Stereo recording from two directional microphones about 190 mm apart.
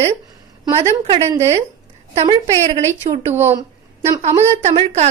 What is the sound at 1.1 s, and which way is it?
Speech, 15° right (ahead or behind).